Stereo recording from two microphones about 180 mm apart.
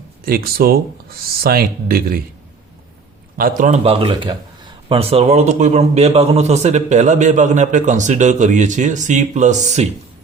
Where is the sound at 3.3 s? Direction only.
50° right (ahead or behind).